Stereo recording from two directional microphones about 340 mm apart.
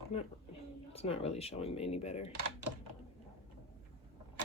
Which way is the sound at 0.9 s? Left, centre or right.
Centre.